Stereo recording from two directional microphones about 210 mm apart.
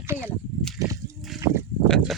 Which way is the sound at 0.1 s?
10° right (ahead or behind).